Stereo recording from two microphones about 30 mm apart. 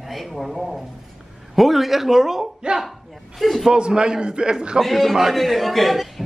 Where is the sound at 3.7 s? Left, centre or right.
Right.